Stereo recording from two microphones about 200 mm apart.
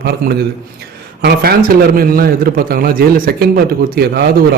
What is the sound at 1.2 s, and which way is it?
A man's voice, 50° right (ahead or behind).